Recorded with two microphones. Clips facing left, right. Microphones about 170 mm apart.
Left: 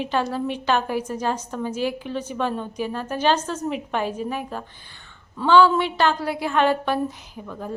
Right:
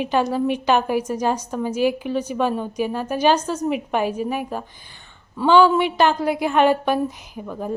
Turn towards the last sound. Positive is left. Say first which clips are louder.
# right 5 dB
turn(degrees=-20)  # may be behind; listen again after turning